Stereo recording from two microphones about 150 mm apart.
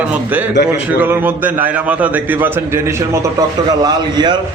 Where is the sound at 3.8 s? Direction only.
30° right (ahead or behind).